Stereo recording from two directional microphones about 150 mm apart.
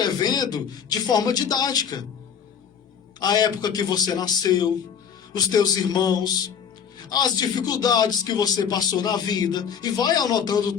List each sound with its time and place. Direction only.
0.0 s a sound: 25° left (ahead or behind)
0.5 s speech: 25° left (ahead or behind)
3.2 s speech: 25° left (ahead or behind)